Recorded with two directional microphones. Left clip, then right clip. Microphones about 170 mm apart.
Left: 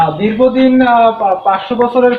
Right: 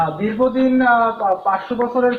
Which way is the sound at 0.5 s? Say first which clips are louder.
Left 7 dB; 20° left (ahead or behind).